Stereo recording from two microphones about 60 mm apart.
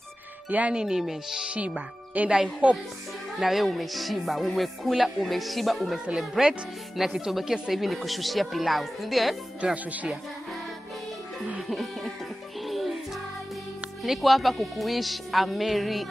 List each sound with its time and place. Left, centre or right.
0.5 s speech: right
2.1 s speech: right
3.3 s music: centre
6.4 s speech: centre
7.0 s music: centre
9.6 s speech: centre
11.6 s music: centre
14.0 s music: centre